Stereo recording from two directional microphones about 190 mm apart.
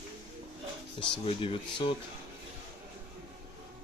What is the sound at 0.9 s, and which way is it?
Speech, 30° left (ahead or behind).